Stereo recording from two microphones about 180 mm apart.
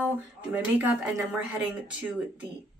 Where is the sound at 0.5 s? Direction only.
10° right (ahead or behind).